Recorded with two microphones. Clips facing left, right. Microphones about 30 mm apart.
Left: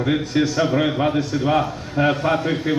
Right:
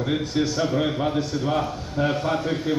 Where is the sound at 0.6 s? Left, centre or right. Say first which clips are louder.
Left 4 dB; left.